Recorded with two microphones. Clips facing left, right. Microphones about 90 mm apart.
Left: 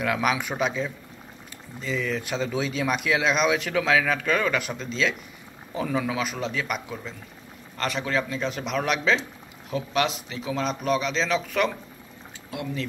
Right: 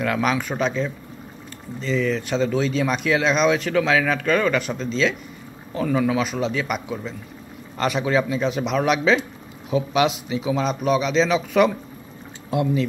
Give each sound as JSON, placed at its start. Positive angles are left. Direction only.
{"t": 0.0, "sound": "a man's voice", "side_deg": 5}
{"t": 12.5, "sound": "speech", "side_deg": -30}